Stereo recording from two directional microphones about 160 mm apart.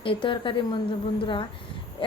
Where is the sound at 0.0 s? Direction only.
30° left (ahead or behind).